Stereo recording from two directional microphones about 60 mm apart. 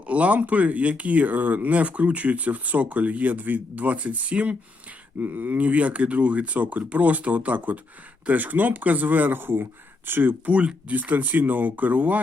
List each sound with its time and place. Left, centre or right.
0.1 s speech: right
10.5 s speech: centre